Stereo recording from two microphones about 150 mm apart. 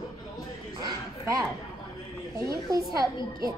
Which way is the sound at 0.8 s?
20° right (ahead or behind).